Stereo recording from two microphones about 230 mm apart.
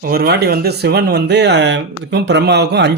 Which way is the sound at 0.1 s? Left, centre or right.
Right.